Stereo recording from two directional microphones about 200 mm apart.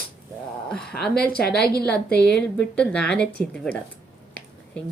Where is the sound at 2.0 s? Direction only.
55° left (ahead or behind).